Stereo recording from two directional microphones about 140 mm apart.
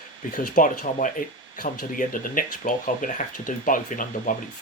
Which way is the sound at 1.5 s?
80° left.